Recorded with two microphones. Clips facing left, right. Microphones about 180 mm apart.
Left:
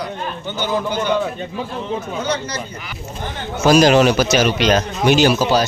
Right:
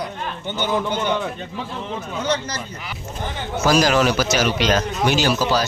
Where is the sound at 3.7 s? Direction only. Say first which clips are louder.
Left 5 dB; 20° left (ahead or behind).